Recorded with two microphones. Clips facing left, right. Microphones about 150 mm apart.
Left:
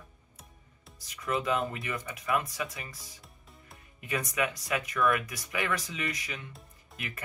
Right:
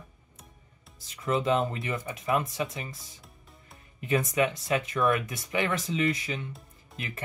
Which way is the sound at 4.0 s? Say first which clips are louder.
Right 6 dB; 25° right (ahead or behind).